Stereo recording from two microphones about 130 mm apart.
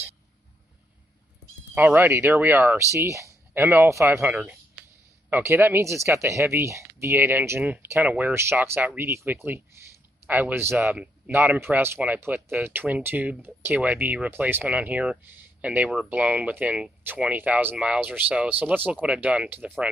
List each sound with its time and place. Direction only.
1.8 s speech: 15° right (ahead or behind)